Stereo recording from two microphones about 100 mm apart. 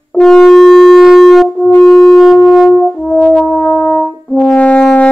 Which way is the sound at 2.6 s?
5° left (ahead or behind).